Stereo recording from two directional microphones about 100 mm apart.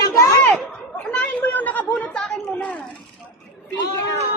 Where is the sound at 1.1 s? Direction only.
15° left (ahead or behind).